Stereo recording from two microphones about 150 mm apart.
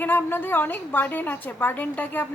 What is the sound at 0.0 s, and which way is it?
A woman's voice, 15° left (ahead or behind).